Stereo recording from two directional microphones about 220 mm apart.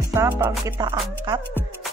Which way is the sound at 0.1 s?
10° right (ahead or behind).